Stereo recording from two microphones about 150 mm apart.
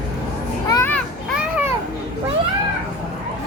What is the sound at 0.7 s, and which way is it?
Children playing, 25° left (ahead or behind).